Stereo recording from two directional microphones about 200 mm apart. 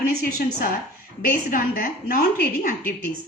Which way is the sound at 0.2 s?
50° left (ahead or behind).